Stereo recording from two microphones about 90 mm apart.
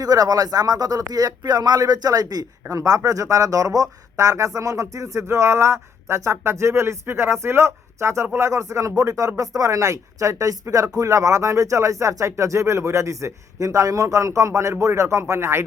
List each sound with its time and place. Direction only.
0.0 s speech: 45° right (ahead or behind); by 15.6 s 30° right (ahead or behind)